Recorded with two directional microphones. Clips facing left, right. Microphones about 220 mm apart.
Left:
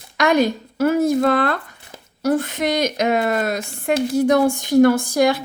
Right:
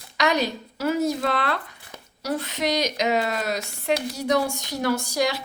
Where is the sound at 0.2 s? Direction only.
50° left (ahead or behind).